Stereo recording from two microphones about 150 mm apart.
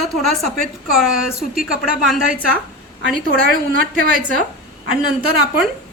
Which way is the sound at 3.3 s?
90° right.